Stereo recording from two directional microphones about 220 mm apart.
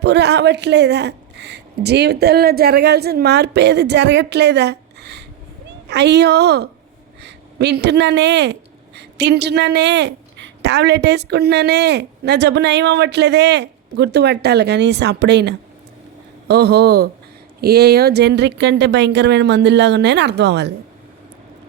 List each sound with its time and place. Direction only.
0.0 s a woman's voice: 50° right (ahead or behind)